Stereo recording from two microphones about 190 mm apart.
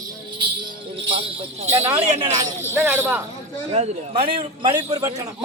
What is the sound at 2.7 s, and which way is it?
Jingle bell, 10° right (ahead or behind).